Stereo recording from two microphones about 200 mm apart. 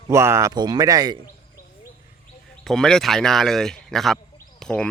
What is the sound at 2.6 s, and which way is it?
Speech, centre (ahead or behind).